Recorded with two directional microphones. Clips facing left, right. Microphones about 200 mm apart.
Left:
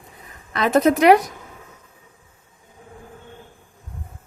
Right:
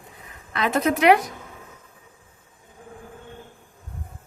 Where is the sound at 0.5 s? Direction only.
40° left (ahead or behind).